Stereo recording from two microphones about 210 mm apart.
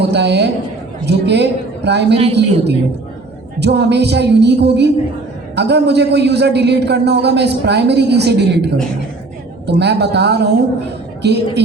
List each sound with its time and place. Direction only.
0.0 s a man's voice: 55° right (ahead or behind)
2.1 s speech: 30° right (ahead or behind)
3.6 s a man's voice: 55° right (ahead or behind)
9.6 s a man's voice: 50° right (ahead or behind)